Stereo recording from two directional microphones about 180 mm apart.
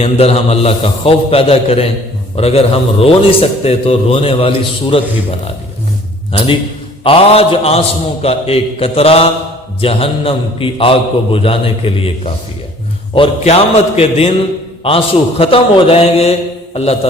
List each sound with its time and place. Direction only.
0.0 s a man's voice: 35° left (ahead or behind)
6.3 s a man's voice: 30° left (ahead or behind)